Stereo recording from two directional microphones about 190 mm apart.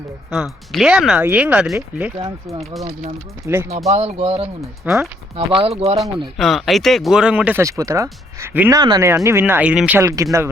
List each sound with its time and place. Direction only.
0.3 s speech: centre (ahead or behind)
3.4 s speech: 10° right (ahead or behind)
3.8 s speech: 35° right (ahead or behind)
4.8 s speech: 10° right (ahead or behind)
5.4 s speech: 30° right (ahead or behind)
6.3 s speech: centre (ahead or behind); by 10.2 s 15° right (ahead or behind)